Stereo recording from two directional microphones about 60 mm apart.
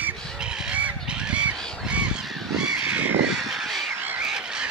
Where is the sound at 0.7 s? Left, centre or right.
Right.